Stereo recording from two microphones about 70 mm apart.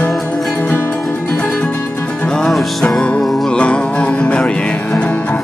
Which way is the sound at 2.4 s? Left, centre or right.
Centre.